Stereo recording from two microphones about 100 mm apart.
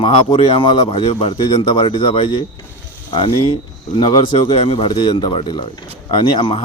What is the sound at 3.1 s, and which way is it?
Speech, 60° left (ahead or behind).